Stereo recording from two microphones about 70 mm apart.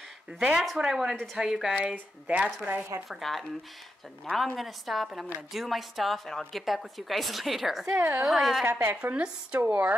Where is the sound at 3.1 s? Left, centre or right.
Centre.